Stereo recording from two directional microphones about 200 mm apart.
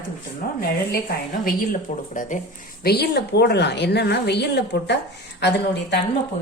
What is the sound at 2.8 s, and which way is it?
A woman's voice, 55° left (ahead or behind).